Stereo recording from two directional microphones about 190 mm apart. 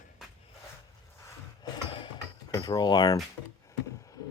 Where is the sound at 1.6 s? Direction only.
25° left (ahead or behind).